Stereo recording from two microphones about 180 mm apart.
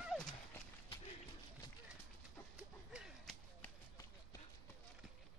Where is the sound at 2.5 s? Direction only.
5° right (ahead or behind).